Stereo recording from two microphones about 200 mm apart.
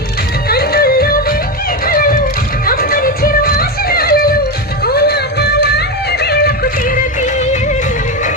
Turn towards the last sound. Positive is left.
turn(degrees=35)  # may be behind; listen again after turning